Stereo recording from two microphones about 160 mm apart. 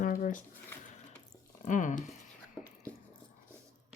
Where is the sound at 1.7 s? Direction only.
50° left (ahead or behind).